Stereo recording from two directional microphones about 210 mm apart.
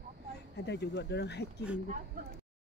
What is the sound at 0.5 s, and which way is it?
Speech, 55° left (ahead or behind).